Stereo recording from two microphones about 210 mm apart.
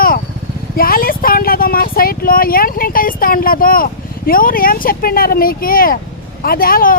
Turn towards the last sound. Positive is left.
turn(degrees=45)  # may be behind; listen again after turning